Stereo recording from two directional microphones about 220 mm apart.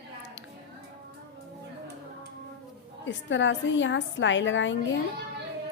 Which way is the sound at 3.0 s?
55° left (ahead or behind).